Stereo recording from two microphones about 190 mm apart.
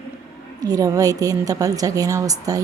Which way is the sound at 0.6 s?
20° right (ahead or behind).